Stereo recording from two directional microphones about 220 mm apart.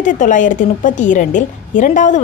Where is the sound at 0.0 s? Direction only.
35° left (ahead or behind).